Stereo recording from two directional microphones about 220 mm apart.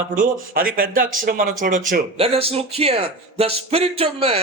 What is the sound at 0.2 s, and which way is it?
Speech, 40° right (ahead or behind).